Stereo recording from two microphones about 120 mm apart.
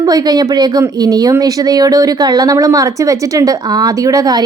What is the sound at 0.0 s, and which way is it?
Speech, 35° right (ahead or behind).